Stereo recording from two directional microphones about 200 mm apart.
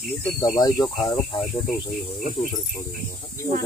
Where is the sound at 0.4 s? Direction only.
20° left (ahead or behind).